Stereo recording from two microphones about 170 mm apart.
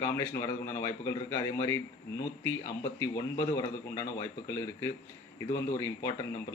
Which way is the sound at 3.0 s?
15° left (ahead or behind).